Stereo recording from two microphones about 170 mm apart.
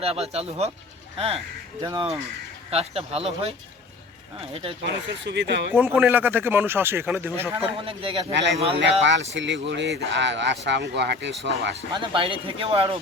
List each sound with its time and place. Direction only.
0.0 s speech: 35° right (ahead or behind)
1.8 s speech: 25° right (ahead or behind)
2.6 s speech: 35° right (ahead or behind)
4.8 s speech: 90° right
5.7 s speech: 10° right (ahead or behind)
7.5 s speech: 30° right (ahead or behind)
8.3 s speech: 90° right
8.5 s speech: 35° right (ahead or behind)
8.8 s speech: 90° right
11.9 s speech: 30° right (ahead or behind)